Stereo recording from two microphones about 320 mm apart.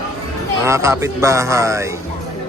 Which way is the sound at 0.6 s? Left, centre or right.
Centre.